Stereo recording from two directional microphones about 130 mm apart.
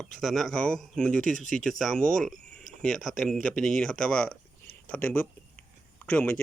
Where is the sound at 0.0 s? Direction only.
Centre (ahead or behind).